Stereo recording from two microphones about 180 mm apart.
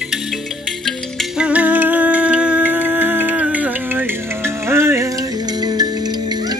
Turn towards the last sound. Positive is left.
turn(degrees=-20)  # may be behind; listen again after turning